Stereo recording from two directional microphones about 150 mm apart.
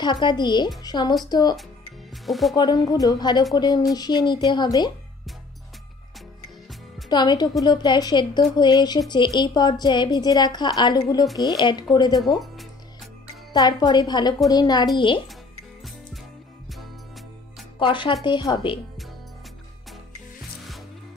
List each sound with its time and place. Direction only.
0.0 s a woman's voice: 30° left (ahead or behind)
2.2 s speech: centre (ahead or behind)
2.5 s a woman's voice: 30° left (ahead or behind)
7.1 s a woman's voice: 30° left (ahead or behind)
13.5 s a woman's voice: 25° left (ahead or behind)
17.7 s a woman's voice: 35° left (ahead or behind)